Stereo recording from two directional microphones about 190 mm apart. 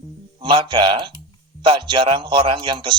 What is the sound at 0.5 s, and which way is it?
Speech, 25° right (ahead or behind).